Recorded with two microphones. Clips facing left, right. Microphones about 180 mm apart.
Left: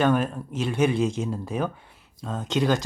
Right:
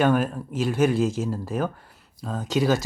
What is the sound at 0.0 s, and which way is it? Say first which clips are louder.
Speech: right 1 dB; 5° right (ahead or behind).